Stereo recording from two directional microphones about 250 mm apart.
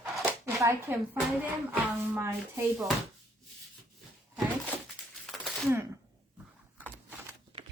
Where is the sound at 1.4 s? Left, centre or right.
Centre.